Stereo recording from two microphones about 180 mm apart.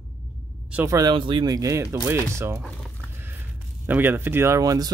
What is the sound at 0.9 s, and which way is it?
Speech, 25° right (ahead or behind).